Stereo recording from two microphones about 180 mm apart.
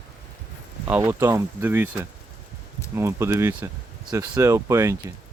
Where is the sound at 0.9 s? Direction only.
10° right (ahead or behind).